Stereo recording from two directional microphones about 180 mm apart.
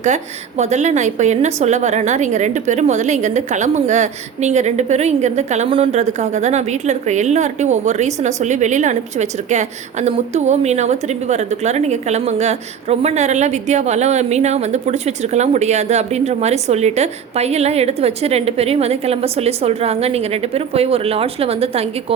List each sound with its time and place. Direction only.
0.0 s a woman's voice: 40° right (ahead or behind)